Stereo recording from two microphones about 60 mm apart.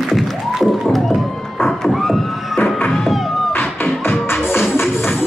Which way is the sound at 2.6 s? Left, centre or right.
Left.